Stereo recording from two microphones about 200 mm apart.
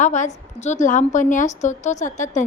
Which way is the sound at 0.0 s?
35° left (ahead or behind).